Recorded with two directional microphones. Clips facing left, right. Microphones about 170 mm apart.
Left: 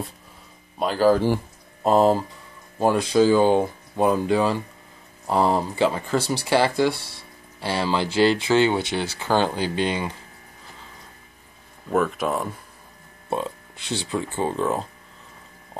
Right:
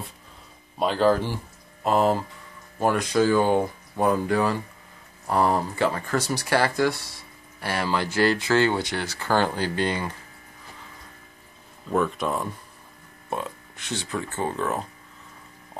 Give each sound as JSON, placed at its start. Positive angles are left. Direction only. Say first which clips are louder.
{"t": 0.7, "sound": "speech", "louder": "left 2 dB", "side_deg": 5}
{"t": 1.8, "sound": "speech", "louder": "left 4 dB", "side_deg": 30}
{"t": 11.9, "sound": "speech", "louder": "left 2 dB", "side_deg": 5}
{"t": 13.3, "sound": "speech", "louder": "left 4 dB", "side_deg": 30}